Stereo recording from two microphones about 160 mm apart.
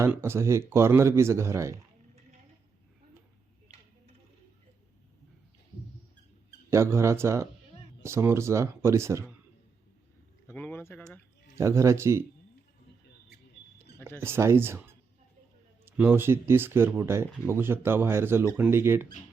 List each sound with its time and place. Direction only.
0.0 s speech: 15° right (ahead or behind)
6.7 s speech: 15° right (ahead or behind)
10.4 s speech: 15° left (ahead or behind)
11.5 s speech: 20° right (ahead or behind)
14.2 s speech: 15° right (ahead or behind)